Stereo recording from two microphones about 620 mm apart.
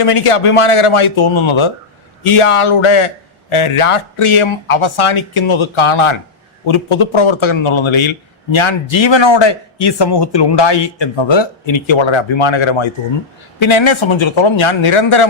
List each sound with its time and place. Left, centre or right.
0.0 s speech: left